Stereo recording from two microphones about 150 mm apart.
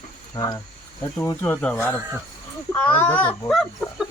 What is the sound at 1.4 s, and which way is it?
A child's voice, 10° left (ahead or behind).